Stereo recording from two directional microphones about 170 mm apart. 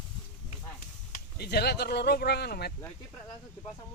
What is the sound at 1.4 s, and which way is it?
Speech, 70° left (ahead or behind).